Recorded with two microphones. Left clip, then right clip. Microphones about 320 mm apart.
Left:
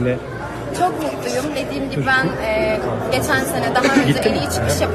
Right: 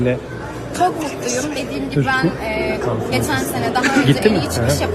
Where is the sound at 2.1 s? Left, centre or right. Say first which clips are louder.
Left 3 dB; centre.